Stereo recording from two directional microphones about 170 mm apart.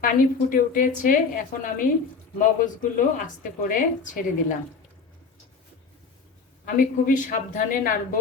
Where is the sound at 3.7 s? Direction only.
50° left (ahead or behind).